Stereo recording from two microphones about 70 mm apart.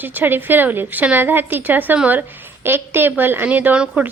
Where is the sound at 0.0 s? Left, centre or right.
Right.